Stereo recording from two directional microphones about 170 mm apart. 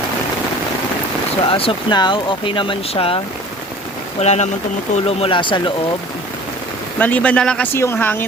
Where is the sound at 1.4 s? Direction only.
30° left (ahead or behind).